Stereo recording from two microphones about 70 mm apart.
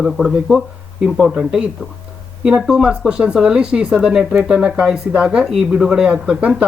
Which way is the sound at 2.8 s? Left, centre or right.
Centre.